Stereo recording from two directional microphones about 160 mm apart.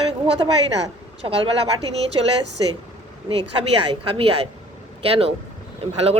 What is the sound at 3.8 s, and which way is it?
Speech, 35° right (ahead or behind).